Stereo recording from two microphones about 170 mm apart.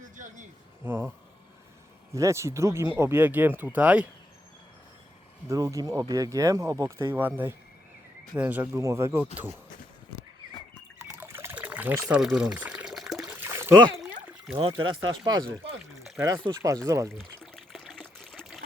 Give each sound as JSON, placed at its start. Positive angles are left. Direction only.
{"t": 0.0, "sound": "a sound", "side_deg": -50}
{"t": 0.9, "sound": "speech", "side_deg": -10}
{"t": 2.1, "sound": "speech", "side_deg": -15}
{"t": 5.5, "sound": "speech", "side_deg": -20}
{"t": 11.1, "sound": "pour", "side_deg": -15}
{"t": 13.4, "sound": "a sound", "side_deg": -15}
{"t": 14.5, "sound": "speech", "side_deg": -25}
{"t": 17.2, "sound": "pour", "side_deg": 0}
{"t": 18.2, "sound": "water", "side_deg": 0}